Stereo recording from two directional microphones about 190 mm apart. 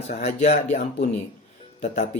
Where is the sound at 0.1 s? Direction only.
35° left (ahead or behind).